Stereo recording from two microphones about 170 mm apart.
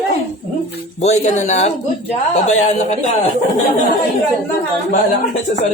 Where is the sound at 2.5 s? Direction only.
45° left (ahead or behind).